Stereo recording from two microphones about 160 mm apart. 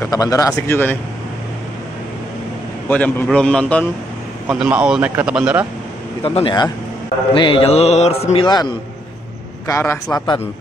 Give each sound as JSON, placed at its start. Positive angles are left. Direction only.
{"t": 0.0, "sound": "speech", "side_deg": 20}
{"t": 2.9, "sound": "a man's voice", "side_deg": 10}
{"t": 4.5, "sound": "a man's voice", "side_deg": -5}
{"t": 6.2, "sound": "mantra", "side_deg": 35}
{"t": 8.5, "sound": "a man's voice", "side_deg": 25}
{"t": 10.1, "sound": "speech", "side_deg": 30}